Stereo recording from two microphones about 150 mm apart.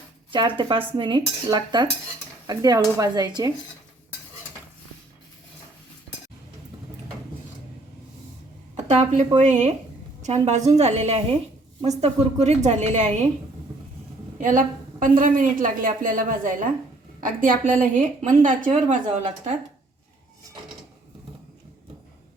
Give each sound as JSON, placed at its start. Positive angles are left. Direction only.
{"t": 0.3, "sound": "speech", "side_deg": -35}
{"t": 0.9, "sound": "cutlery", "side_deg": -30}
{"t": 8.7, "sound": "a woman's voice", "side_deg": -50}
{"t": 14.3, "sound": "a woman's voice", "side_deg": -55}